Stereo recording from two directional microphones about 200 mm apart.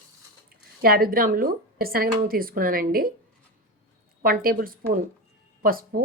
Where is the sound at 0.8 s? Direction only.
45° right (ahead or behind).